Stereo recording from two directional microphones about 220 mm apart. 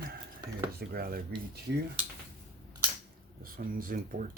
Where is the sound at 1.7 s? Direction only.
55° right (ahead or behind).